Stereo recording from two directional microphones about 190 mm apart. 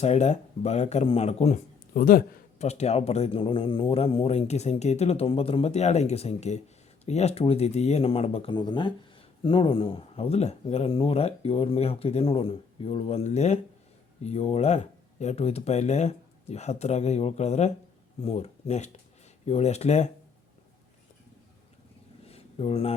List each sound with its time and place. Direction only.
0.0 s speech: 35° left (ahead or behind)
2.6 s speech: 35° left (ahead or behind)
22.3 s a sound: 30° left (ahead or behind)